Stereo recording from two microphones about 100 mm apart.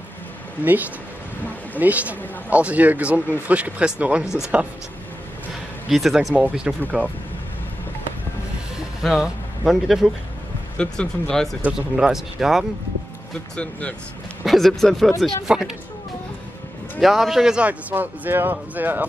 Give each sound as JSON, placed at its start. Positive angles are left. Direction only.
{"t": 0.7, "sound": "speech", "side_deg": -15}
{"t": 5.9, "sound": "speech", "side_deg": 0}
{"t": 6.3, "sound": "speech", "side_deg": -10}
{"t": 9.0, "sound": "speech", "side_deg": 0}
{"t": 11.6, "sound": "speech", "side_deg": -5}
{"t": 13.6, "sound": "speech", "side_deg": 15}
{"t": 14.4, "sound": "speech", "side_deg": 0}
{"t": 17.0, "sound": "speech", "side_deg": -5}